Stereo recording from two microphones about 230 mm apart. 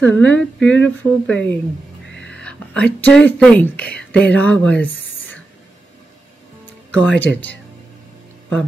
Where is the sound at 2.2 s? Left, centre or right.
Centre.